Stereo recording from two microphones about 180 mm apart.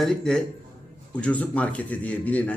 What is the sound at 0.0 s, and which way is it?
A man's voice, 5° left (ahead or behind).